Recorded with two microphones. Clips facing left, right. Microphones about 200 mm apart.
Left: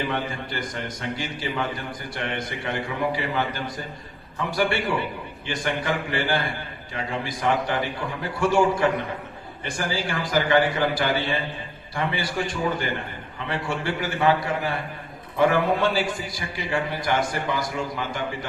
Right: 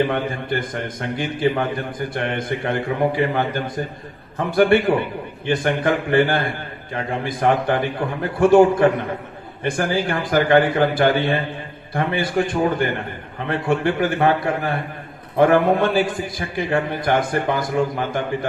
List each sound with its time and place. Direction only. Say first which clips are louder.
0.0 s a man's voice: right 7 dB; 55° right (ahead or behind)